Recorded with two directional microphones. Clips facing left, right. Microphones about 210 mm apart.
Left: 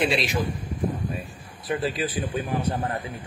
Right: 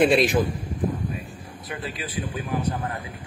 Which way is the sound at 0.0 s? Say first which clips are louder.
Right 6 dB; 50° right (ahead or behind).